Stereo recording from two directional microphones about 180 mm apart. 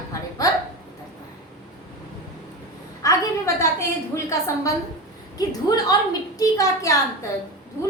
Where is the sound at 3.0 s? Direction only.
15° left (ahead or behind).